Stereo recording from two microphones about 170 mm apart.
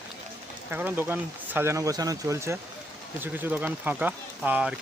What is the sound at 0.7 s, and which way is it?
Speech, 10° right (ahead or behind).